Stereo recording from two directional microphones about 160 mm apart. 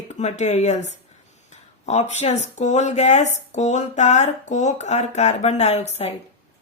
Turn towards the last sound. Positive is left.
turn(degrees=40)  # may be behind; listen again after turning